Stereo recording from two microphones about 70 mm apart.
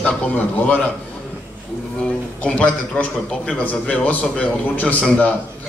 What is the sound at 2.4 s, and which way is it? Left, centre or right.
A man's voice, centre.